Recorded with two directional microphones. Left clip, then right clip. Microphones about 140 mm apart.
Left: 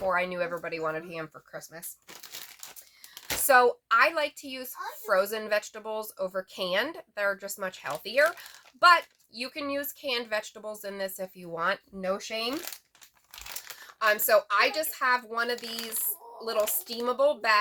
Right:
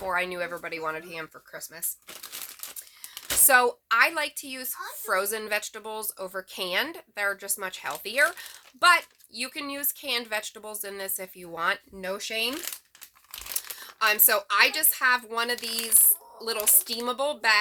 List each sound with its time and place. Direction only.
0.0 s a woman's voice: 25° right (ahead or behind)
3.4 s a woman's voice: 25° right (ahead or behind)
13.5 s a woman's voice: 30° right (ahead or behind)